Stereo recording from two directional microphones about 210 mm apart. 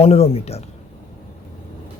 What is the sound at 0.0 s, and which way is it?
Speech, 30° left (ahead or behind).